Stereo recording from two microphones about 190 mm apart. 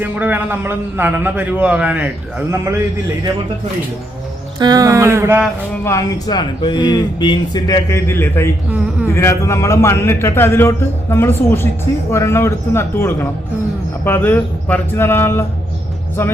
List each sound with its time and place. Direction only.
0.0 s a man's voice: 10° right (ahead or behind)
4.6 s a man's voice: 20° right (ahead or behind)
5.8 s a man's voice: 15° left (ahead or behind)